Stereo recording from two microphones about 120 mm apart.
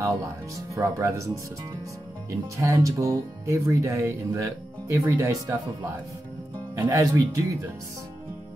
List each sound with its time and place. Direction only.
0.7 s speech: 25° right (ahead or behind)
2.5 s speech: 25° right (ahead or behind)
6.7 s speech: 25° right (ahead or behind)